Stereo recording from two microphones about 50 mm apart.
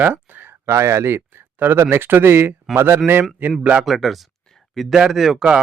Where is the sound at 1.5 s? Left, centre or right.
Right.